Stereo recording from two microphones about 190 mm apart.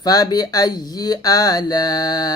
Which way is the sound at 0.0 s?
20° left (ahead or behind).